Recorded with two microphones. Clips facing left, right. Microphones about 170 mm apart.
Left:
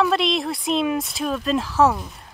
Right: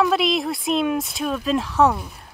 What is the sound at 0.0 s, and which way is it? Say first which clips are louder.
Speech: right 1 dB; centre (ahead or behind).